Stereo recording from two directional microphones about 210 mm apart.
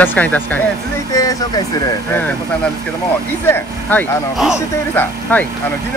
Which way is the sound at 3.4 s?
10° left (ahead or behind).